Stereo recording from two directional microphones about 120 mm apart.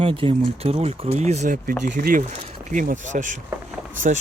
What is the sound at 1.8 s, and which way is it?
Speech, 85° right.